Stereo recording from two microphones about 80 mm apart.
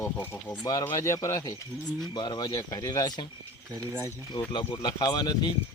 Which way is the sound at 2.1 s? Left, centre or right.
Left.